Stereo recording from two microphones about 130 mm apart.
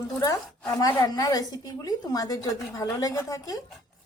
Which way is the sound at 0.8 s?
25° left (ahead or behind).